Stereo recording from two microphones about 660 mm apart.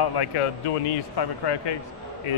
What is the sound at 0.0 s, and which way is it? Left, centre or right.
A man's voice, left.